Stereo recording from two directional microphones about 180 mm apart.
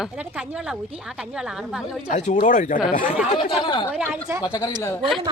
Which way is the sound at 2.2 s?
45° left (ahead or behind).